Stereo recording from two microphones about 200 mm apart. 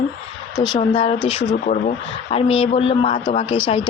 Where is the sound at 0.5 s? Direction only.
Centre (ahead or behind).